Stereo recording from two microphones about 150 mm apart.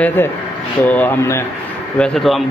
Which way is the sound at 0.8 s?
10° left (ahead or behind).